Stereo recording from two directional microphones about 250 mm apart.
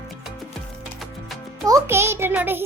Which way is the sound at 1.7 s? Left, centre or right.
Centre.